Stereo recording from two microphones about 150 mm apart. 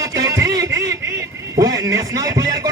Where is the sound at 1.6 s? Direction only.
20° right (ahead or behind).